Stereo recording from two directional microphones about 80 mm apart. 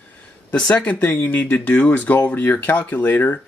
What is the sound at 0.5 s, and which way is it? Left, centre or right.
Speech, centre.